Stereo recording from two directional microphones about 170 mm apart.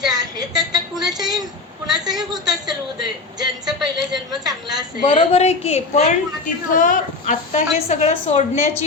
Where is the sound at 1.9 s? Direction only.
25° right (ahead or behind).